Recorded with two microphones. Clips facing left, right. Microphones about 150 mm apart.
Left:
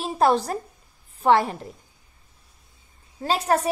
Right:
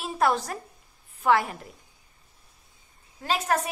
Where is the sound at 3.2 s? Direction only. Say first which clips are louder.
Left 4 dB; 35° left (ahead or behind).